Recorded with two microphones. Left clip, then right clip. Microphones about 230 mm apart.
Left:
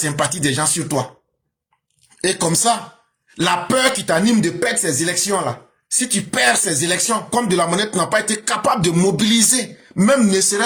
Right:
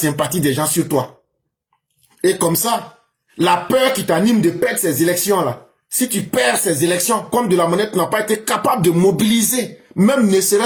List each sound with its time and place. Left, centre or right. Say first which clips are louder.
0.0 s speech: right 2 dB; left
2.2 s speech: right 1 dB; left